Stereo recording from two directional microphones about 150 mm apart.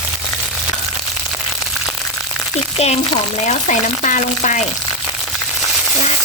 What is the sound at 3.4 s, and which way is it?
Speech, 55° left (ahead or behind).